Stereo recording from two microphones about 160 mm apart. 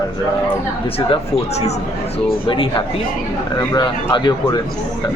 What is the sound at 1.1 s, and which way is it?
Speech, 40° left (ahead or behind).